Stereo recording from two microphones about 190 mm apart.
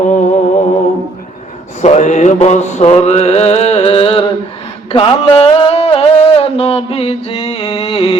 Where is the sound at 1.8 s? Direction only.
35° left (ahead or behind).